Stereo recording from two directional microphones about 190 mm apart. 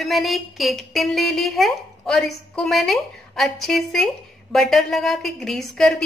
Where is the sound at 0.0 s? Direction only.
Centre (ahead or behind).